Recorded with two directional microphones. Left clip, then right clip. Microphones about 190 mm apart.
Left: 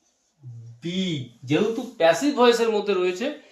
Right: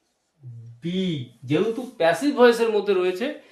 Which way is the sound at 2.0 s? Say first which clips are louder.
Right 1 dB; 15° right (ahead or behind).